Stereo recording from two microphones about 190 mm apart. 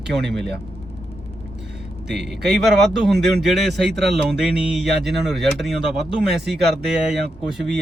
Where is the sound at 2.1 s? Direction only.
Centre (ahead or behind).